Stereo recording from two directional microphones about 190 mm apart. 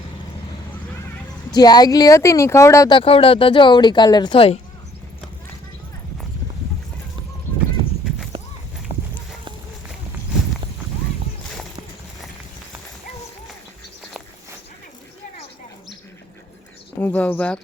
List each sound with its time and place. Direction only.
1.5 s speech: 20° left (ahead or behind)
3.0 s speech: 30° left (ahead or behind)
8.3 s horse: 30° right (ahead or behind)
17.0 s speech: 10° left (ahead or behind)